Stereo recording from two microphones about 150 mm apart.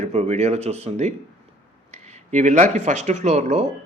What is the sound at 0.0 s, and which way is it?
Speech, 50° right (ahead or behind).